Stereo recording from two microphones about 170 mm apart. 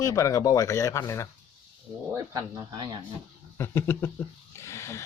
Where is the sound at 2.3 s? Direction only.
25° right (ahead or behind).